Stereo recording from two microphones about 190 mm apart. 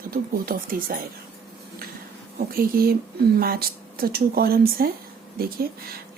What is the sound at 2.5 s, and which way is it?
Speech, 50° right (ahead or behind).